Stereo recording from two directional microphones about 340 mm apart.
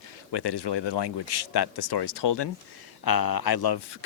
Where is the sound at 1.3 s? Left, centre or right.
Left.